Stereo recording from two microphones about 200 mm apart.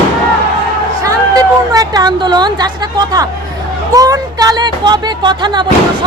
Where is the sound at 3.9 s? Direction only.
15° right (ahead or behind).